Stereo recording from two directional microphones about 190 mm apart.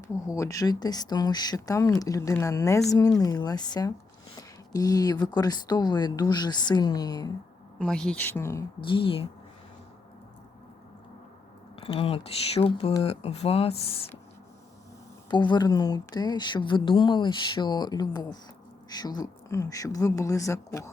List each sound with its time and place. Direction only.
0.1 s speech: 15° left (ahead or behind)
7.8 s speech: 5° left (ahead or behind)
8.8 s speech: 25° left (ahead or behind)
11.8 s speech: 30° left (ahead or behind)
15.3 s speech: 25° left (ahead or behind)